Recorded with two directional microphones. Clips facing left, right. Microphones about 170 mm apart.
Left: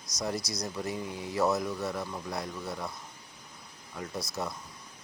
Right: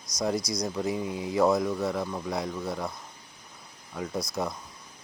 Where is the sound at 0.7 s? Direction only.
20° right (ahead or behind).